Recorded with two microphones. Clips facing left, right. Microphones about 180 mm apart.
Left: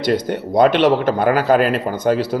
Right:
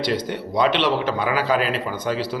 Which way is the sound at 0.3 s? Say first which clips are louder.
Left 8 dB; 45° left (ahead or behind).